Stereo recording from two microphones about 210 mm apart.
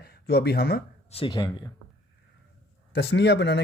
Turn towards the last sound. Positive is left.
turn(degrees=55)  # may be behind; listen again after turning